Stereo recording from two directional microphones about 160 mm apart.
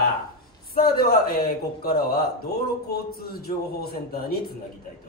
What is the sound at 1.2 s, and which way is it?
A man's voice, 70° left (ahead or behind).